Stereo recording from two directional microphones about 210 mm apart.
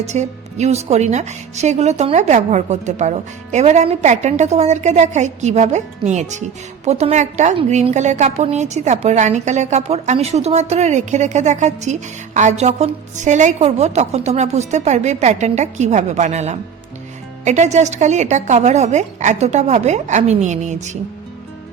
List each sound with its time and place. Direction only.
0.0 s a woman's voice: 35° right (ahead or behind)